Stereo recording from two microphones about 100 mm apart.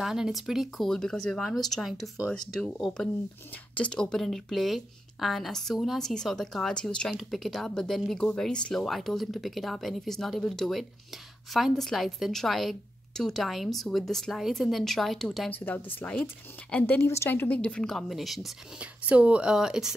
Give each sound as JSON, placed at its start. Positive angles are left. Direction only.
{"t": 0.0, "sound": "a woman's voice", "side_deg": -5}
{"t": 15.5, "sound": "a woman's voice", "side_deg": 20}
{"t": 18.8, "sound": "speech", "side_deg": -10}